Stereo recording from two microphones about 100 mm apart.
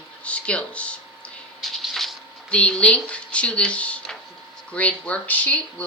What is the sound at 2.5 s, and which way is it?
Speech, 10° left (ahead or behind).